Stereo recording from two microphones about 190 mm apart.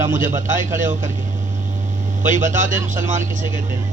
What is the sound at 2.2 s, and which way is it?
Speech, 40° right (ahead or behind).